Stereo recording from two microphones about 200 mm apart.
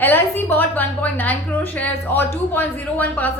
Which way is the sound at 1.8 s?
10° left (ahead or behind).